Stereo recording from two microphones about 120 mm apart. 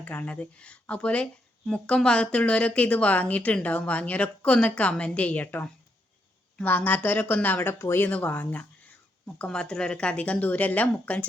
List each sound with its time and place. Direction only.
0.0 s speech: 15° left (ahead or behind)